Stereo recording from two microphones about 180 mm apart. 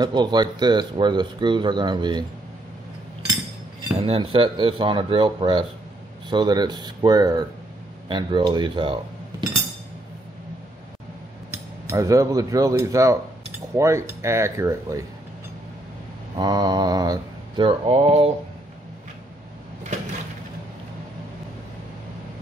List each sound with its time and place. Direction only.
0.0 s speech: 25° right (ahead or behind)
4.0 s speech: 30° right (ahead or behind)
11.5 s speech: 15° right (ahead or behind)
16.3 s speech: 20° right (ahead or behind)